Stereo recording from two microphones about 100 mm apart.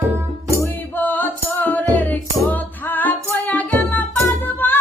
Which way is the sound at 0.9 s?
15° left (ahead or behind).